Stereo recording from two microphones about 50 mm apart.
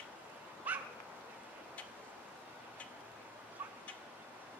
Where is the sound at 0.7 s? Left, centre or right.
Right.